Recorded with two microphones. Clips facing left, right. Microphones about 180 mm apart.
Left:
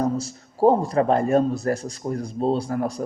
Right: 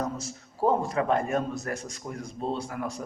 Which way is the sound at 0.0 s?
35° left (ahead or behind).